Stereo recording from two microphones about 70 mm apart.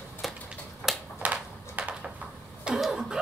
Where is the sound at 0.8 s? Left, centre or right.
Right.